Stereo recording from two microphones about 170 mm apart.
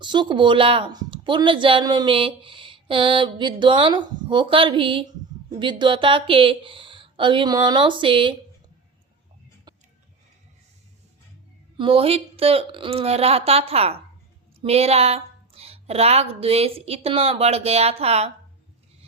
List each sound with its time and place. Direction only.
0.0 s speech: 25° right (ahead or behind)
11.8 s a woman's voice: 35° right (ahead or behind)